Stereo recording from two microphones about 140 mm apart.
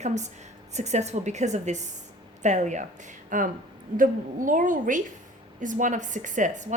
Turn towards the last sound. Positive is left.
turn(degrees=-60)  # may be behind; listen again after turning